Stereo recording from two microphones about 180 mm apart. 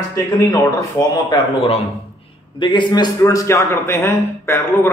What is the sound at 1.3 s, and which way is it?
A man's voice, 30° left (ahead or behind).